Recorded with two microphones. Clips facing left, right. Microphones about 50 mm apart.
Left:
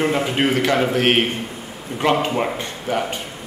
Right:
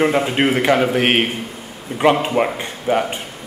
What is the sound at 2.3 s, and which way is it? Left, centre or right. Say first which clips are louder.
Speech: right 3 dB; centre.